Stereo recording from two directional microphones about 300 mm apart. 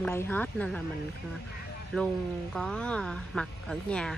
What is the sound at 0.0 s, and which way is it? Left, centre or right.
Speech, centre.